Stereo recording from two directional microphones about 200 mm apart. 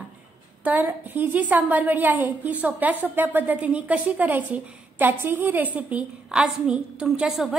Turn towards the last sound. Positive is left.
turn(degrees=0)  # may be behind; listen again after turning